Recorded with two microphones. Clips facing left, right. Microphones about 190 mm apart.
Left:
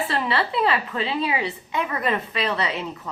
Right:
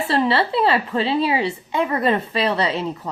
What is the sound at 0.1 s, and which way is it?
A woman's voice, 30° right (ahead or behind).